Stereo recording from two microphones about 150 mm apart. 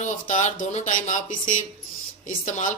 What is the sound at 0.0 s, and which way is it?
A woman's voice, 55° left (ahead or behind).